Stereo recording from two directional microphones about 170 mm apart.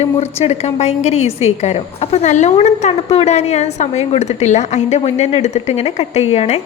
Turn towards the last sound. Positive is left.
turn(degrees=40)  # may be behind; listen again after turning